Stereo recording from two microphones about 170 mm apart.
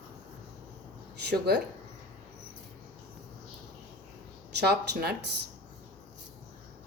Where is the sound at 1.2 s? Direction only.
80° right.